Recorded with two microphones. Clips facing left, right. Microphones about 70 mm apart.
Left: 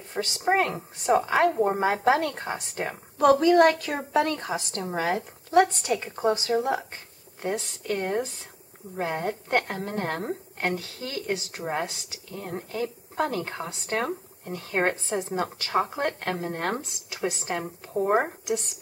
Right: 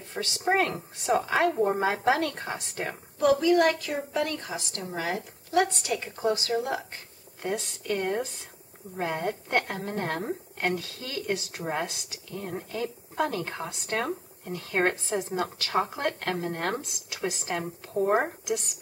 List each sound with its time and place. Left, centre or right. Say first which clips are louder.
0.1 s a woman's voice: left 2 dB; centre
3.3 s a woman's voice: left 4 dB; left
3.7 s a woman's voice: left 5 dB; left
6.1 s a woman's voice: left 1 dB; left
7.4 s a woman's voice: left 1 dB; centre